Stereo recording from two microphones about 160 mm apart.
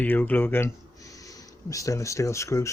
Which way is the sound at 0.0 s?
10° left (ahead or behind).